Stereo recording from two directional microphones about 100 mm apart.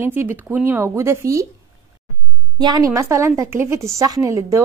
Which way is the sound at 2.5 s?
45° right (ahead or behind).